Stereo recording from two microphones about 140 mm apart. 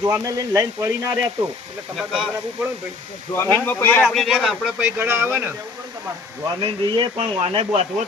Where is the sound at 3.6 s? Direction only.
15° left (ahead or behind).